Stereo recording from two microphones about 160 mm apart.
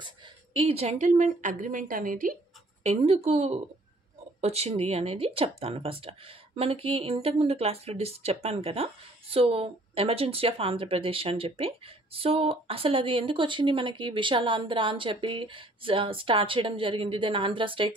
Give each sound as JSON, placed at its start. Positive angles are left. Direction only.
{"t": 0.0, "sound": "a woman's voice", "side_deg": -35}
{"t": 2.8, "sound": "speech", "side_deg": -40}